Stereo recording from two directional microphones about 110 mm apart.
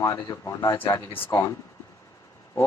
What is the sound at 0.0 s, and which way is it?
Speech, 30° left (ahead or behind).